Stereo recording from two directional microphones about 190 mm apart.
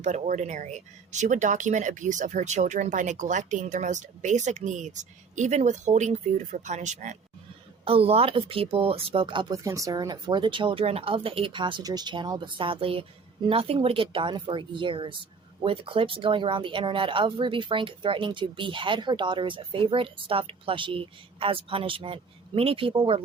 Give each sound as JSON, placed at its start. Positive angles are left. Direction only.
{"t": 0.0, "sound": "speech", "side_deg": -40}